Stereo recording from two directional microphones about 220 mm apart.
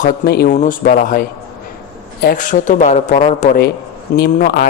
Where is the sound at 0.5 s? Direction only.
35° left (ahead or behind).